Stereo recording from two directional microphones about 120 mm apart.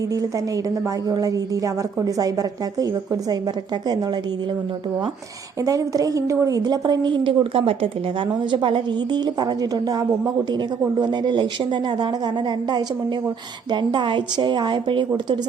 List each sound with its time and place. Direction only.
0.1 s a woman's voice: 30° right (ahead or behind)
5.6 s a woman's voice: 30° right (ahead or behind)